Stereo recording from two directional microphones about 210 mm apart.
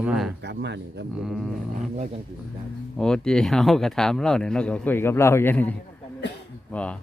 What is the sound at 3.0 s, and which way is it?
Speech, 5° left (ahead or behind).